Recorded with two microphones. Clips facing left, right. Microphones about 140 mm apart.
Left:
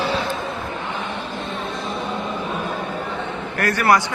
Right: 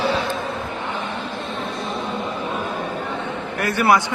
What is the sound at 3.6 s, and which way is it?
Speech, 20° right (ahead or behind).